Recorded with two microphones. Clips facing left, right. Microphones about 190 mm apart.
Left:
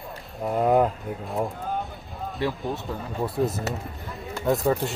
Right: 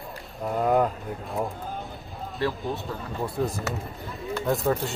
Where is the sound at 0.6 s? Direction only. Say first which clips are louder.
Left 2 dB; 5° left (ahead or behind).